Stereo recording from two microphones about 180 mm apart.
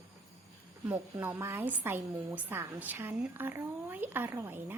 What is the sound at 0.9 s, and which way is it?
A woman's voice, 10° right (ahead or behind).